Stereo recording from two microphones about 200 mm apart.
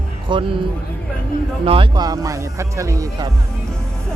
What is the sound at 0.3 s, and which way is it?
Speech, 25° right (ahead or behind).